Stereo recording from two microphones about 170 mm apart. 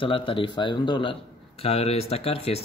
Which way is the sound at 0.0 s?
30° left (ahead or behind).